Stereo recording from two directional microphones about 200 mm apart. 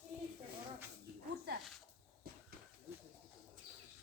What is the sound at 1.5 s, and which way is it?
Dog, 55° right (ahead or behind).